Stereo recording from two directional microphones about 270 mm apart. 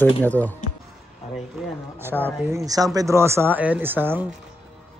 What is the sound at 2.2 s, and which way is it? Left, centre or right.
A man's voice, centre.